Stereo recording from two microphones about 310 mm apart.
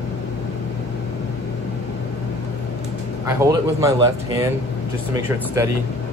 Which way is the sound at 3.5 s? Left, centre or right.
Centre.